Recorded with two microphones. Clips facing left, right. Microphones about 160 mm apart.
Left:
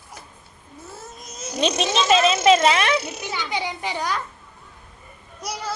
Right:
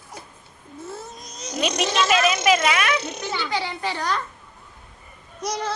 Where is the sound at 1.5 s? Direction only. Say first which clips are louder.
Left 1 dB; 25° left (ahead or behind).